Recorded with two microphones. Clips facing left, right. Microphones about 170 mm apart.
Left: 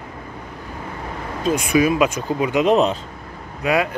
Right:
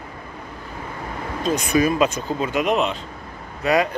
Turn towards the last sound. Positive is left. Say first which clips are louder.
# even
turn(degrees=10)  # may be behind; listen again after turning